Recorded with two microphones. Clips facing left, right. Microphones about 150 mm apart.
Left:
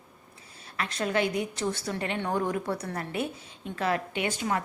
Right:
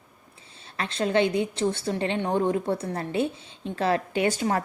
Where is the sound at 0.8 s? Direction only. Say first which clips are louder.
Right 4 dB; 25° right (ahead or behind).